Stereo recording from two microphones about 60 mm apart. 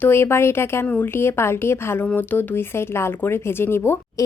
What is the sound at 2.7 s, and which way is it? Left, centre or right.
A woman's voice, left.